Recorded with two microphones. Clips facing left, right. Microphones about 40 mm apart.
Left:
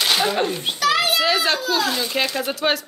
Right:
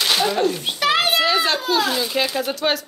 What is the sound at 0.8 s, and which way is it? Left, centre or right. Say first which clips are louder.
Speech: right 1 dB; right.